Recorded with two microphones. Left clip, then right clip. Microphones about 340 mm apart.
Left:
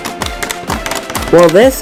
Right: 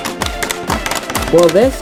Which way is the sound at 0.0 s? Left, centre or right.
Centre.